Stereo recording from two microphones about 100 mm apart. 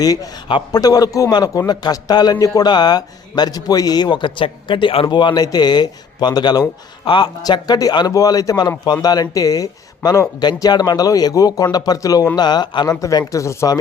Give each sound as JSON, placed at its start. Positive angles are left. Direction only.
{"t": 0.0, "sound": "a man's voice", "side_deg": 40}
{"t": 7.4, "sound": "speech", "side_deg": 40}